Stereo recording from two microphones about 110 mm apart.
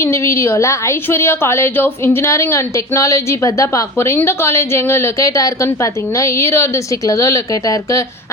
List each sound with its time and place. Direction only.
0.0 s a woman's voice: 25° left (ahead or behind)